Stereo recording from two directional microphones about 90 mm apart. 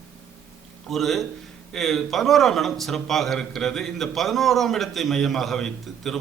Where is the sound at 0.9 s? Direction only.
Centre (ahead or behind).